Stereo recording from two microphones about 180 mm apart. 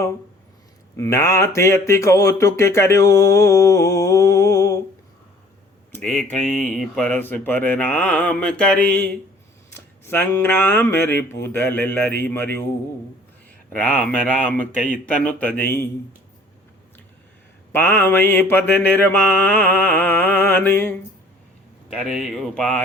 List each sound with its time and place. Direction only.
0.9 s speech: 15° left (ahead or behind)
5.9 s speech: 10° left (ahead or behind)
14.5 s speech: 10° left (ahead or behind)
17.7 s speech: 10° left (ahead or behind)
21.9 s speech: centre (ahead or behind)